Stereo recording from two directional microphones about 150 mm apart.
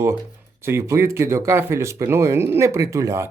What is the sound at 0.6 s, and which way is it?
Speech, 20° right (ahead or behind).